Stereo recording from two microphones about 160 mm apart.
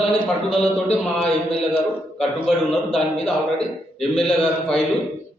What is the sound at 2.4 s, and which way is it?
A man's voice, 5° left (ahead or behind).